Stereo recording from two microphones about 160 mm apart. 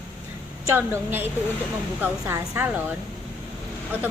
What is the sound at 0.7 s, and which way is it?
A woman's voice, 15° right (ahead or behind).